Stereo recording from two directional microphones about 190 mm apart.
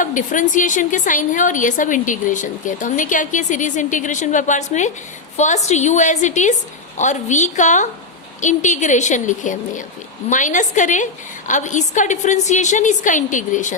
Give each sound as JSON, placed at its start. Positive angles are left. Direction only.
{"t": 0.0, "sound": "a woman's voice", "side_deg": 40}